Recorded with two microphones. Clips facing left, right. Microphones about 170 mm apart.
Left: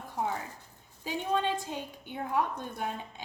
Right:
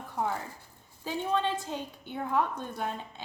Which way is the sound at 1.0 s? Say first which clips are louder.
Right 1 dB; 15° left (ahead or behind).